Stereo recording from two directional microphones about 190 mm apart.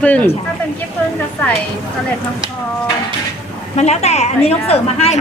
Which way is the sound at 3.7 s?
35° left (ahead or behind).